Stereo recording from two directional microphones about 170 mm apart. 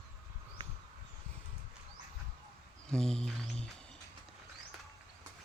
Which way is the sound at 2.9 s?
5° left (ahead or behind).